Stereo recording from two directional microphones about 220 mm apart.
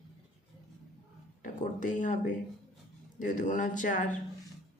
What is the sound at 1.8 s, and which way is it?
Speech, 35° left (ahead or behind).